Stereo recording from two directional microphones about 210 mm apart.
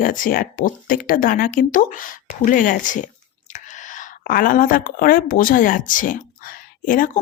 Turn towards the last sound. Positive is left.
turn(degrees=40)  # may be behind; listen again after turning